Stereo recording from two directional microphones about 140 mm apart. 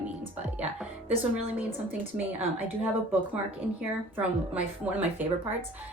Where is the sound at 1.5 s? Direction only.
10° right (ahead or behind).